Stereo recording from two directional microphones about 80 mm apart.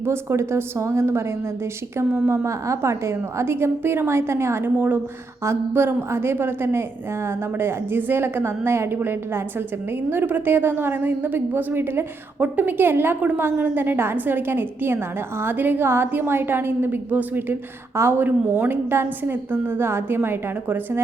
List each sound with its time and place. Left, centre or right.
0.0 s a woman's voice: right